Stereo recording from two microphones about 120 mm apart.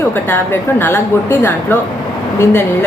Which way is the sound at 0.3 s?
15° left (ahead or behind).